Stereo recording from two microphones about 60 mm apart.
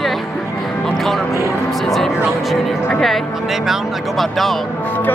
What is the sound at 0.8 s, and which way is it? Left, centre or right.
Music, centre.